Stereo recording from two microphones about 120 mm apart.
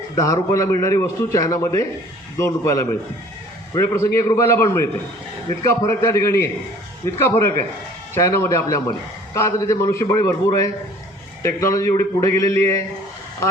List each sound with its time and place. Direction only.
0.2 s a man's voice: 30° left (ahead or behind)